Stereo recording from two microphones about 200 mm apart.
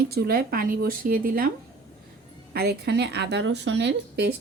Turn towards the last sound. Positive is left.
turn(degrees=-60)  # may be behind; listen again after turning